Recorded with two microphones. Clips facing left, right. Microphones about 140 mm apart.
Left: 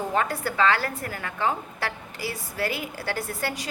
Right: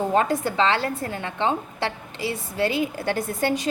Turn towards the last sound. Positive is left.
turn(degrees=-20)  # may be behind; listen again after turning